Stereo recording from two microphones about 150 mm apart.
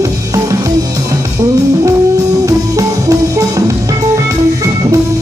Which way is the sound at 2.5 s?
20° right (ahead or behind).